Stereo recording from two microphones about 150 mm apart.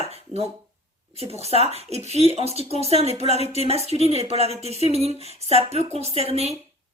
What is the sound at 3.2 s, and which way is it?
Speech, 45° left (ahead or behind).